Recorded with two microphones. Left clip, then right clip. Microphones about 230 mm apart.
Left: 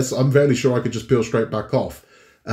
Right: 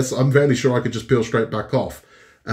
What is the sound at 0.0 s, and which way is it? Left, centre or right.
Speech, centre.